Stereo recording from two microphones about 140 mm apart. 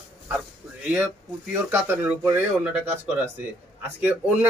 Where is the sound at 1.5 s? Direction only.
15° right (ahead or behind).